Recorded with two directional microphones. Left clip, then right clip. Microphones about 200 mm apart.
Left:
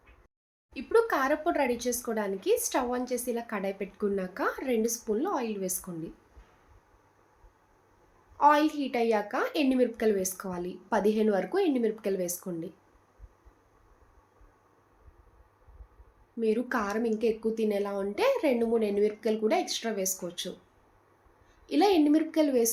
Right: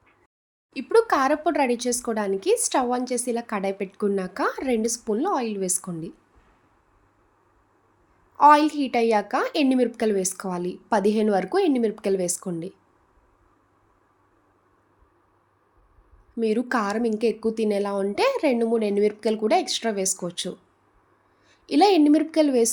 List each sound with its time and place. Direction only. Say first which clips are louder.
0.7 s speech: right 6 dB; 55° right (ahead or behind)
8.4 s a woman's voice: right 7 dB; 55° right (ahead or behind)
16.4 s a woman's voice: right 5 dB; 55° right (ahead or behind)
21.7 s a woman's voice: right 6 dB; 50° right (ahead or behind)